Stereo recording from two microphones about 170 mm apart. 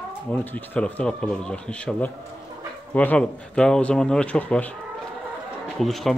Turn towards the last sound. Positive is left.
turn(degrees=0)  # may be behind; listen again after turning